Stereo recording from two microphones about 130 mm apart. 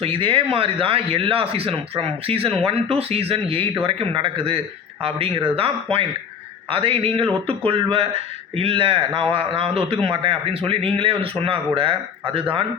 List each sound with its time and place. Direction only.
0.0 s a man's voice: 45° right (ahead or behind)